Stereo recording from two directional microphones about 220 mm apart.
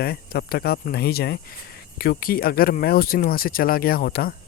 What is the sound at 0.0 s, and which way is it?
Speech, 45° left (ahead or behind).